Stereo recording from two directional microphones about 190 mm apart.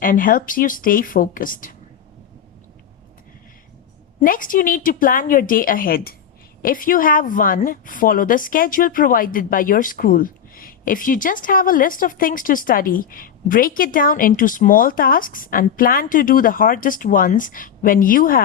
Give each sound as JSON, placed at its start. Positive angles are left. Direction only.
{"t": 0.0, "sound": "a woman's voice", "side_deg": 45}
{"t": 4.2, "sound": "a woman's voice", "side_deg": 45}